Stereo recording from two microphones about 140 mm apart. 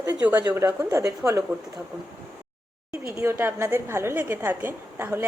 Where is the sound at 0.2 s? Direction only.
15° right (ahead or behind).